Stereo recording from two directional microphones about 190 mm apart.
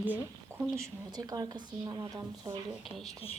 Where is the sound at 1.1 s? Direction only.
20° right (ahead or behind).